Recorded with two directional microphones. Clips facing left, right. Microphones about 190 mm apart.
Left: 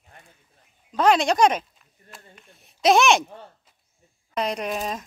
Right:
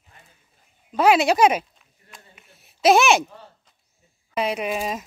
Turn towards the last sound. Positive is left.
turn(degrees=-5)  # may be behind; listen again after turning